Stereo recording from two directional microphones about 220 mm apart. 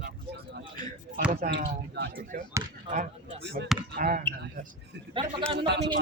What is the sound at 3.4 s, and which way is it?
Speech, 50° right (ahead or behind).